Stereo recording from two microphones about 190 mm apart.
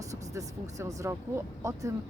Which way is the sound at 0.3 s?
15° right (ahead or behind).